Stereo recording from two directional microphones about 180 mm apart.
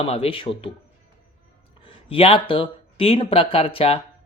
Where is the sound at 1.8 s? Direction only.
30° left (ahead or behind).